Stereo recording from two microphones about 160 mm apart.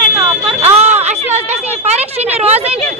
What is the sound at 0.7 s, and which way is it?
A woman's voice, 45° right (ahead or behind).